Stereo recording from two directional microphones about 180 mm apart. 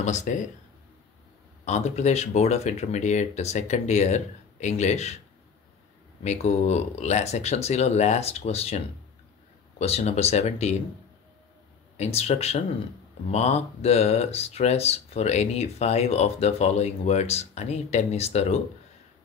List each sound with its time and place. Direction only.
0.0 s speech: 40° left (ahead or behind)
1.6 s speech: 40° left (ahead or behind)
6.2 s speech: 35° left (ahead or behind)
12.0 s speech: 35° left (ahead or behind)